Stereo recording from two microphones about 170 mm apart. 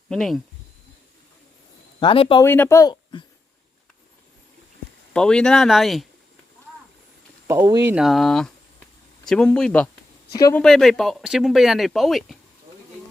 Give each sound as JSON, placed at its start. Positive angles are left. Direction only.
{"t": 0.1, "sound": "speech", "side_deg": 0}
{"t": 2.0, "sound": "speech", "side_deg": 30}
{"t": 2.4, "sound": "speech", "side_deg": 15}
{"t": 2.9, "sound": "babbling", "side_deg": 30}
{"t": 5.1, "sound": "speech", "side_deg": 5}
{"t": 7.4, "sound": "speech", "side_deg": -20}
{"t": 7.9, "sound": "speech", "side_deg": -5}